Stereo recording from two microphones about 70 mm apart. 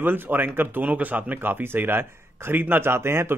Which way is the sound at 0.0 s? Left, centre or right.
Right.